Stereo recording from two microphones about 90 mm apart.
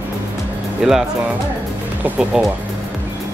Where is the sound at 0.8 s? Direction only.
5° right (ahead or behind).